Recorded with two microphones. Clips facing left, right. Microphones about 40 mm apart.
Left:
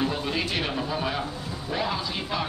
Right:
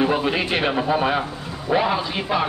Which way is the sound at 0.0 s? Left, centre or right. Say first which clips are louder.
Right 7 dB; right.